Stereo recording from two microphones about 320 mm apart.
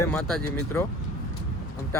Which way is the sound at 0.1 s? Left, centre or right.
Centre.